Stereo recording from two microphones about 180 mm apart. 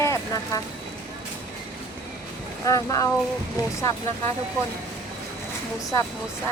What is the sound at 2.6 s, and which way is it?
Speech, 20° left (ahead or behind).